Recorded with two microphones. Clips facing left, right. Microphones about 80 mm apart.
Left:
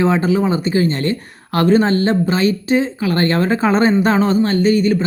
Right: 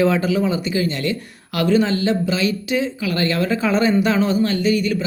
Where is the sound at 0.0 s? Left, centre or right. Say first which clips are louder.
Left 2 dB; left.